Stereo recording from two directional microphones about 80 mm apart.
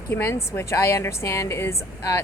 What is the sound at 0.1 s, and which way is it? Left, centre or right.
A woman's voice, left.